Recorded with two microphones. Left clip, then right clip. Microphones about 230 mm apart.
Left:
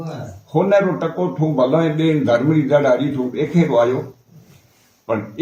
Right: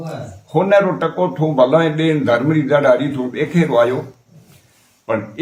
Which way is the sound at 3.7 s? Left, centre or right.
Right.